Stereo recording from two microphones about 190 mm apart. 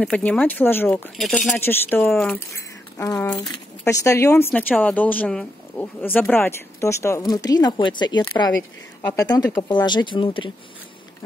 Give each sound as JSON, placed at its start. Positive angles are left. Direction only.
{"t": 0.0, "sound": "speech", "side_deg": 5}
{"t": 1.6, "sound": "speech", "side_deg": 10}
{"t": 3.0, "sound": "speech", "side_deg": 15}